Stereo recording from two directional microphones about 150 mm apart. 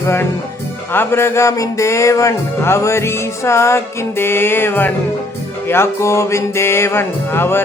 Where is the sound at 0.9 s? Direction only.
15° left (ahead or behind).